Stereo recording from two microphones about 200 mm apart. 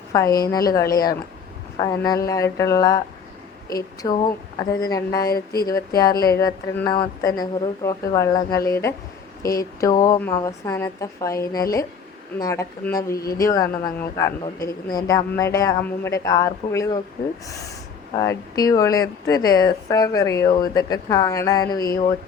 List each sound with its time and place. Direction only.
0.1 s speech: 15° left (ahead or behind)
18.1 s speech: 15° left (ahead or behind)